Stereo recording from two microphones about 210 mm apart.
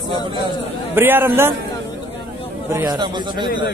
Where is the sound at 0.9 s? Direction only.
10° right (ahead or behind).